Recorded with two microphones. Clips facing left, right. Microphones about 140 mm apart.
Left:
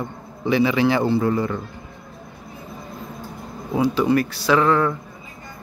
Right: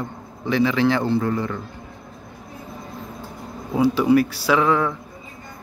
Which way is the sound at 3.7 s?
5° right (ahead or behind).